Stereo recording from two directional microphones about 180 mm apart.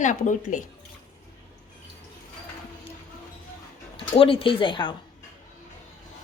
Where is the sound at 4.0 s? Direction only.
30° left (ahead or behind).